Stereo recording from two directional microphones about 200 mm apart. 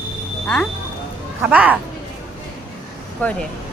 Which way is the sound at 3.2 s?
10° left (ahead or behind).